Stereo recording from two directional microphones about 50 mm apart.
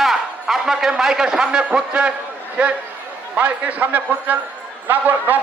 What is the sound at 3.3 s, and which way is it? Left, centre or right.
A man's voice, right.